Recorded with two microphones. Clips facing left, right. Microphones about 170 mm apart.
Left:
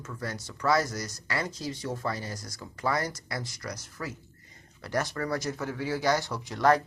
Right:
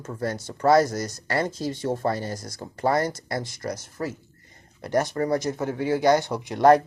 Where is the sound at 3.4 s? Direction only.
25° right (ahead or behind).